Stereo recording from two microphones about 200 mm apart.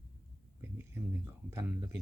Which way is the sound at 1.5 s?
15° right (ahead or behind).